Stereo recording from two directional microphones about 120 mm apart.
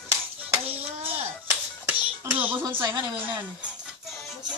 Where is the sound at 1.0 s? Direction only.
50° right (ahead or behind).